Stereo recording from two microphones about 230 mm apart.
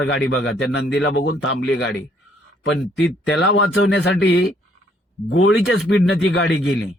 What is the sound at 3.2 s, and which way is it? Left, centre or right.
Speech, left.